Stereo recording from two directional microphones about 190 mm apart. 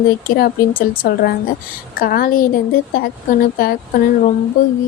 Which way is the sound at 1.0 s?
55° left (ahead or behind).